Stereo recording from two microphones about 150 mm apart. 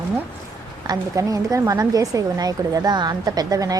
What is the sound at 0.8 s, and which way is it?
A woman's voice, 20° right (ahead or behind).